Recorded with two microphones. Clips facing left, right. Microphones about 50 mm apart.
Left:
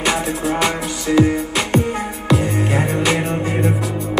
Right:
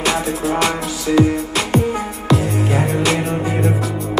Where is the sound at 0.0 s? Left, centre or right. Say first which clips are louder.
Even; centre.